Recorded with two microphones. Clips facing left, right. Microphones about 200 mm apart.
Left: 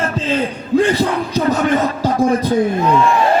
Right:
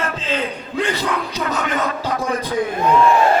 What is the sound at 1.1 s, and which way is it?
Music, 35° left (ahead or behind).